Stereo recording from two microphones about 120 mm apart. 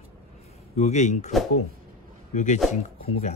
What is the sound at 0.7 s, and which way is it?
Speech, 75° left (ahead or behind).